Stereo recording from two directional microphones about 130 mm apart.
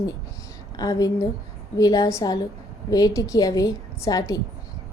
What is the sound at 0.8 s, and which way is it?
A woman's voice, 30° left (ahead or behind).